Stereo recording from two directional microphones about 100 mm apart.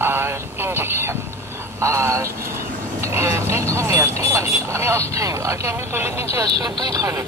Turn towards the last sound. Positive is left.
turn(degrees=-35)  # may be behind; listen again after turning